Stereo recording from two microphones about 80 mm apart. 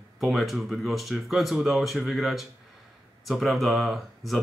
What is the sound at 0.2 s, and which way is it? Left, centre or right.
Speech, centre.